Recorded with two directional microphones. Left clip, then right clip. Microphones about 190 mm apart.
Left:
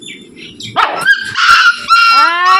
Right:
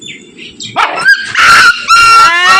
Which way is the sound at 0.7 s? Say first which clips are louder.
Right 3 dB; 25° right (ahead or behind).